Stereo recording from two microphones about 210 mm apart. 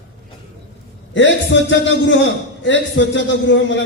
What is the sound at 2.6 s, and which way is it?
Speech, 60° left (ahead or behind).